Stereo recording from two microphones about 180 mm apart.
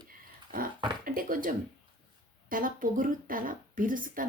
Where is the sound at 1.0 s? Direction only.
50° right (ahead or behind).